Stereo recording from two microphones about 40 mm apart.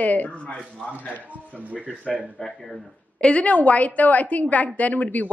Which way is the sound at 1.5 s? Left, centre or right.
Right.